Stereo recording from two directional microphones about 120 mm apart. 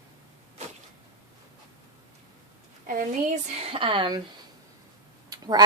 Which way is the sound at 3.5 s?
55° right (ahead or behind).